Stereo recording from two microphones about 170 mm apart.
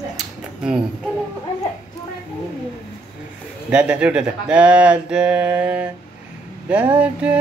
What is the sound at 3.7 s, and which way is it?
Speech, 5° right (ahead or behind).